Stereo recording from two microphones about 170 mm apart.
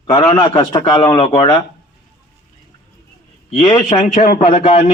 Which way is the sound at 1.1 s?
35° left (ahead or behind).